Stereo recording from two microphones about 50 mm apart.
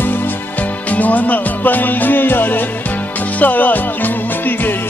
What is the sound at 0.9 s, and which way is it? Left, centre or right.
Music, left.